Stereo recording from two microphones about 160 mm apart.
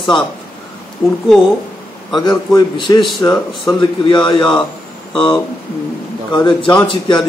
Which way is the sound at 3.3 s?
Centre (ahead or behind).